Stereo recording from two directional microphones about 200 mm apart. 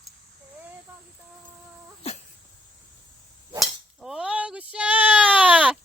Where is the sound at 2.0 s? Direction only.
30° left (ahead or behind).